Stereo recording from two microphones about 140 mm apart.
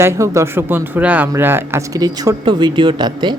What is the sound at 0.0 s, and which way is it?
Speech, 20° right (ahead or behind).